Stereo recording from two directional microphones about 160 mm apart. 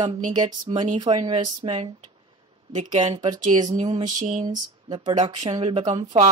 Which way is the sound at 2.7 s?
50° right (ahead or behind).